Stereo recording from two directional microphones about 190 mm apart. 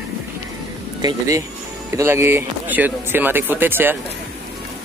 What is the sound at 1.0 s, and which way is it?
Speech, 20° right (ahead or behind).